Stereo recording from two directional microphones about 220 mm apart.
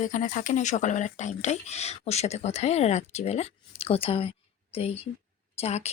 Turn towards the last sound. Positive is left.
turn(degrees=30)  # may be behind; listen again after turning